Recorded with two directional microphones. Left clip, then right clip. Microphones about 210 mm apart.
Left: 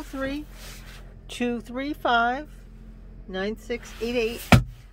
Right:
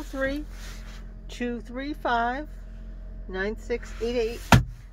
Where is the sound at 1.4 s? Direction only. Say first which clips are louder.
Left 3 dB; 20° left (ahead or behind).